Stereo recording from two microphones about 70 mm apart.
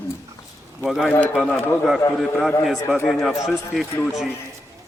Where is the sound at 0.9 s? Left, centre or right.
Centre.